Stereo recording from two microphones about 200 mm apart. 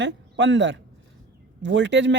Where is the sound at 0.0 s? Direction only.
65° right (ahead or behind).